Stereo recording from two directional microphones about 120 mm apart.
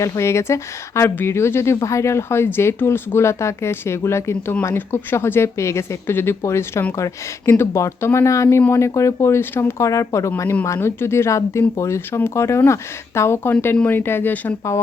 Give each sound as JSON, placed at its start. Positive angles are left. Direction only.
{"t": 0.0, "sound": "speech", "side_deg": 25}